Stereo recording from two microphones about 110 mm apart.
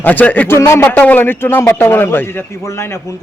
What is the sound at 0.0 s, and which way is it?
A man's voice, 15° left (ahead or behind).